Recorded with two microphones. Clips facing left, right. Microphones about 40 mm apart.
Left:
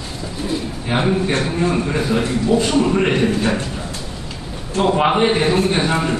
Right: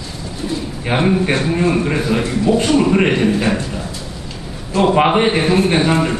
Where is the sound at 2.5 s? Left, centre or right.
Right.